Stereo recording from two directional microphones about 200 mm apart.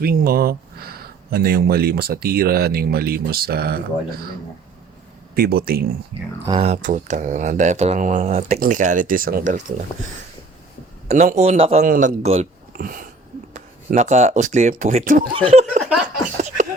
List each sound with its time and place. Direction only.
0.0 s speech: 50° right (ahead or behind)
5.3 s speech: 50° right (ahead or behind)
6.6 s speech: 35° right (ahead or behind)
11.1 s speech: 35° right (ahead or behind)
12.7 s speech: 45° right (ahead or behind)